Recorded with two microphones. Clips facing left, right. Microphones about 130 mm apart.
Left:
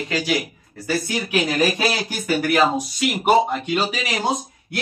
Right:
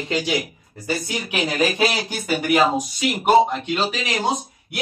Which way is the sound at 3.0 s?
10° left (ahead or behind).